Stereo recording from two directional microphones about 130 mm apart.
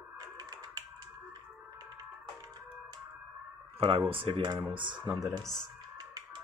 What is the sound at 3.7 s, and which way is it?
Speech, 45° right (ahead or behind).